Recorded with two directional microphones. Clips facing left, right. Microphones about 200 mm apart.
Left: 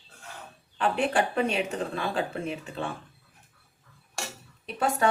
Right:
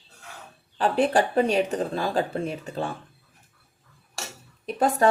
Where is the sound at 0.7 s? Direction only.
35° right (ahead or behind).